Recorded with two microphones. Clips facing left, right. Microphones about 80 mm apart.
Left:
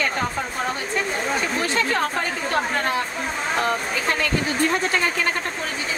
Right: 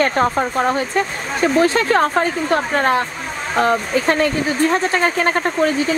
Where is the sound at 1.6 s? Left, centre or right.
Right.